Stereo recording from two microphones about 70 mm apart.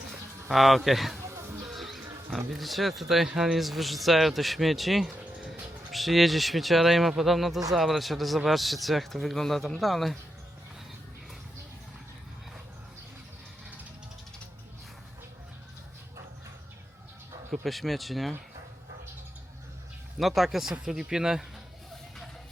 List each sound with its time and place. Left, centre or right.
0.1 s a sound: centre
1.3 s music: right
1.6 s pig: centre
2.5 s speech: centre
17.5 s speech: centre
20.1 s speech: centre